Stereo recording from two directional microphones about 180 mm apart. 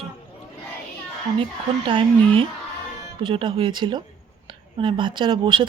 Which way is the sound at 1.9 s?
30° right (ahead or behind).